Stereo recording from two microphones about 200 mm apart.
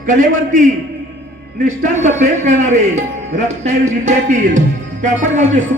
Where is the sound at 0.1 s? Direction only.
40° right (ahead or behind).